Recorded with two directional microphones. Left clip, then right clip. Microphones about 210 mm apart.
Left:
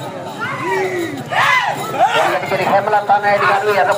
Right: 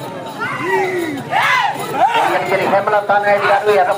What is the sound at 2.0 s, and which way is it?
Chatter, 30° left (ahead or behind).